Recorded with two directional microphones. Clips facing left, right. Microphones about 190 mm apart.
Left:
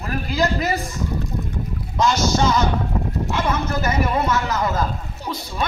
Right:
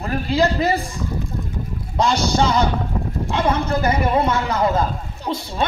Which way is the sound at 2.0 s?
30° right (ahead or behind).